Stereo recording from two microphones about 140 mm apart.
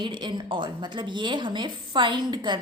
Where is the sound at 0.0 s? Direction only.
35° right (ahead or behind).